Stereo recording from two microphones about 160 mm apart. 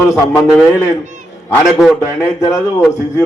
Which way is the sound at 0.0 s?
15° left (ahead or behind).